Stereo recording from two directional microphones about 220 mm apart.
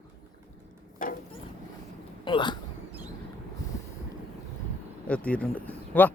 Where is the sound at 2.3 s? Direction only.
20° left (ahead or behind).